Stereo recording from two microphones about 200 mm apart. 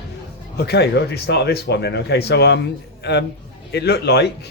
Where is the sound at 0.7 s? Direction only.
55° left (ahead or behind).